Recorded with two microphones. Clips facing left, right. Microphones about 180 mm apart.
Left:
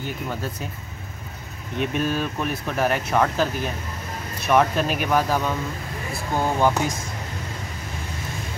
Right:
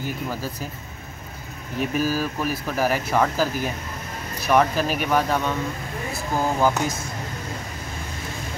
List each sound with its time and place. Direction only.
0.3 s speech: 5° right (ahead or behind)
1.8 s speech: 5° right (ahead or behind)